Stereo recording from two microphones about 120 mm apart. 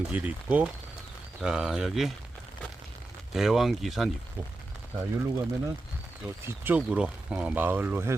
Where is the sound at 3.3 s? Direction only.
Centre (ahead or behind).